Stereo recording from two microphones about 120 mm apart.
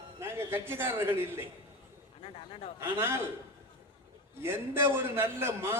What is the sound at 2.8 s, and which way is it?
Speech, 20° right (ahead or behind).